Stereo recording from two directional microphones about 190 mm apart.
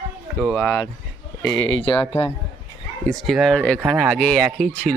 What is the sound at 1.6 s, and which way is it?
Speech, 90° left.